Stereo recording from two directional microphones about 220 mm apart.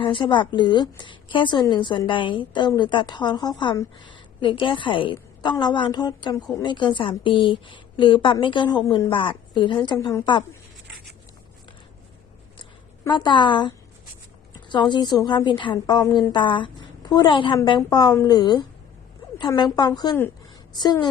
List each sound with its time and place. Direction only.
0.0 s a woman's voice: 20° left (ahead or behind)
13.1 s a woman's voice: 20° left (ahead or behind)